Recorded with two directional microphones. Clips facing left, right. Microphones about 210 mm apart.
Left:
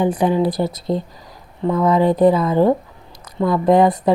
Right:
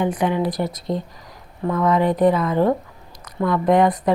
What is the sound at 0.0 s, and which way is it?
Speech, 30° left (ahead or behind).